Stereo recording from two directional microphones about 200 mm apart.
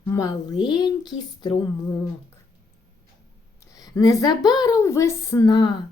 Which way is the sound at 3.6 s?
15° left (ahead or behind).